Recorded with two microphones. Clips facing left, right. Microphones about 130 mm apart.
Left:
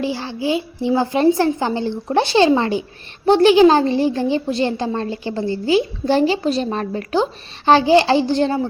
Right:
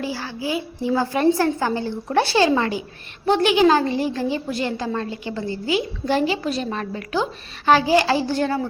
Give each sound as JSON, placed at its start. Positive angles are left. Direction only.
{"t": 0.0, "sound": "a woman's voice", "side_deg": 25}